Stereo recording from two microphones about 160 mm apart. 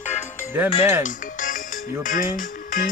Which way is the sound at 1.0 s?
55° left (ahead or behind).